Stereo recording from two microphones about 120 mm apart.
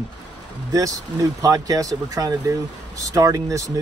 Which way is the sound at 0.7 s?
30° right (ahead or behind).